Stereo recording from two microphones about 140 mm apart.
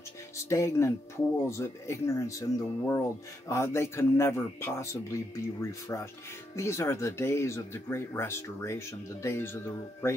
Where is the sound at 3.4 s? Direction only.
20° left (ahead or behind).